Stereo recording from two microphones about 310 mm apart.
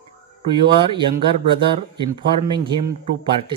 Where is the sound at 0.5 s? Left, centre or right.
Centre.